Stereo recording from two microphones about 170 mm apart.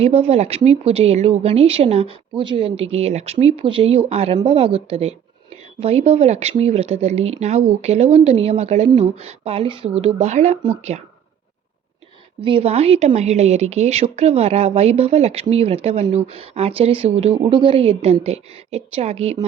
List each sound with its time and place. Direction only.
0.0 s speech: 35° right (ahead or behind)
12.4 s speech: 30° right (ahead or behind)